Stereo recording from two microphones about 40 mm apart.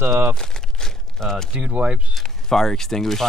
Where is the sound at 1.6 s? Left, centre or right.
Right.